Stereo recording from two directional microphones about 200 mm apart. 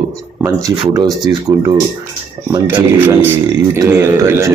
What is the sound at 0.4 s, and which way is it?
A man's voice, 15° right (ahead or behind).